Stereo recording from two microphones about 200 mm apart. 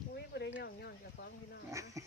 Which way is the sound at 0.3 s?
55° left (ahead or behind).